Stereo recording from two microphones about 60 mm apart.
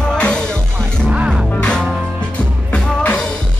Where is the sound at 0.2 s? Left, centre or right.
Centre.